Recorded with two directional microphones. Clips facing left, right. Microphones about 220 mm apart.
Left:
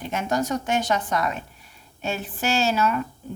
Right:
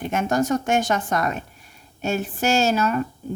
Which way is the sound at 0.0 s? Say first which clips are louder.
Right 3 dB; 50° right (ahead or behind).